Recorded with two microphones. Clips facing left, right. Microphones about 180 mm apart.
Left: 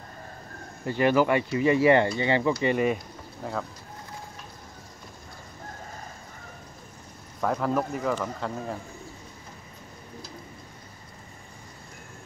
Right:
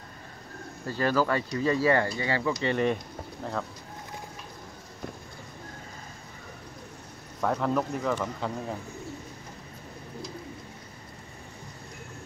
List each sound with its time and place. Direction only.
0.8 s speech: 20° left (ahead or behind)
2.6 s speech: 10° left (ahead or behind)
7.4 s speech: 5° left (ahead or behind)